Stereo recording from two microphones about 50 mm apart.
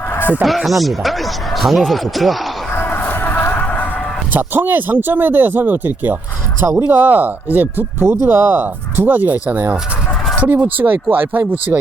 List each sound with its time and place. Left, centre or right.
0.4 s speech: centre
2.7 s music: left
4.3 s speech: right
8.0 s speech: right